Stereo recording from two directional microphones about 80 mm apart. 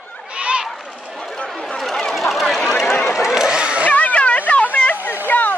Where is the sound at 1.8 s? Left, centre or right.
Centre.